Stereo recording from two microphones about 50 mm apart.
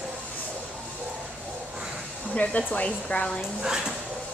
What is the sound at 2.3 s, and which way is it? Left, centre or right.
Speech, left.